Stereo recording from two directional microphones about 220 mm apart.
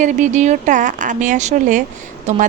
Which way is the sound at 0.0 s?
35° right (ahead or behind).